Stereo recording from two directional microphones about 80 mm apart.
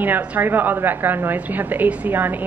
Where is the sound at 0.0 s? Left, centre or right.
Centre.